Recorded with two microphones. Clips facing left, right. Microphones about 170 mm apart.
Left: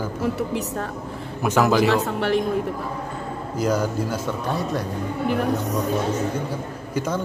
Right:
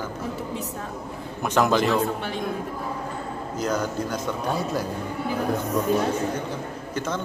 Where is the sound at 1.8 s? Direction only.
75° left (ahead or behind).